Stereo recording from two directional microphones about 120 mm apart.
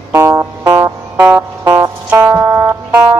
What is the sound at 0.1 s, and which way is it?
Music, 25° right (ahead or behind).